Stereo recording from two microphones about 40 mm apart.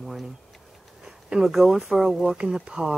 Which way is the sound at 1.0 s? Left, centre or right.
Centre.